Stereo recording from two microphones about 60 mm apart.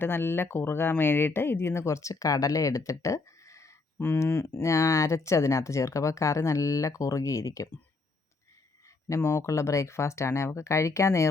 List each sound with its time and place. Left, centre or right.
0.0 s speech: left
3.9 s speech: left
9.0 s speech: left
9.5 s speech: left